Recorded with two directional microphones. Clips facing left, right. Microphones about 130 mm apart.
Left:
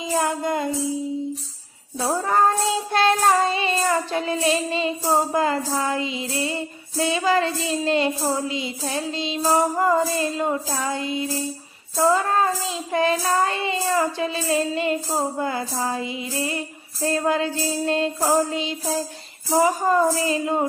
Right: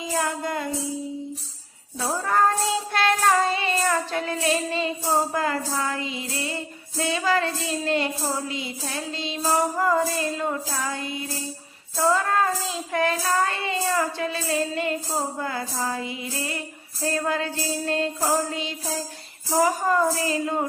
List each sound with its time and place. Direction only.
0.2 s child singing: 20° left (ahead or behind)
2.0 s child singing: 25° left (ahead or behind)